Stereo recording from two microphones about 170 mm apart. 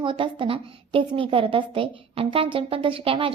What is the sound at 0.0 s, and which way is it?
A woman's voice, 30° right (ahead or behind).